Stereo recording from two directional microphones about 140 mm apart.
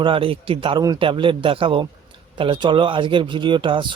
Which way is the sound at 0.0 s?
40° right (ahead or behind).